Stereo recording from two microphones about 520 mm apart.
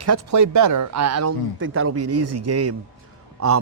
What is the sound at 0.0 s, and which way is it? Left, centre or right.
Speech, right.